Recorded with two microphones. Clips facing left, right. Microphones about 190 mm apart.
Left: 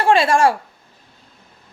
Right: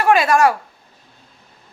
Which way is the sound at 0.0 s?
30° left (ahead or behind).